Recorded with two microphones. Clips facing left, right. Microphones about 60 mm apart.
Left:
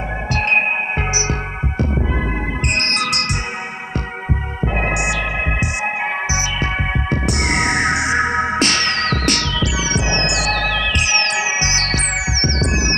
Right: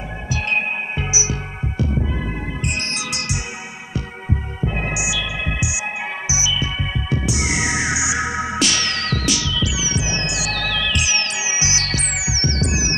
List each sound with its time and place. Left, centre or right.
0.3 s music: left
1.8 s throbbing: left
2.6 s music: left
4.6 s music: left
4.9 s music: left
10.5 s music: left